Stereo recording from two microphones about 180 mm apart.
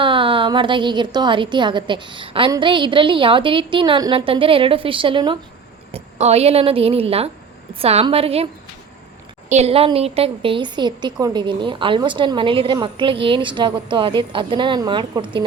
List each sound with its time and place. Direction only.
0.0 s a woman's voice: 30° right (ahead or behind)
9.5 s a woman's voice: 35° right (ahead or behind)